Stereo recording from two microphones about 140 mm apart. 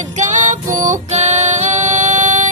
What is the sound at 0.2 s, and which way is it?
Music, 60° right (ahead or behind).